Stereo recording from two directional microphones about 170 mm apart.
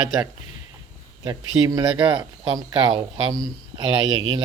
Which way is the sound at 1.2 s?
20° right (ahead or behind).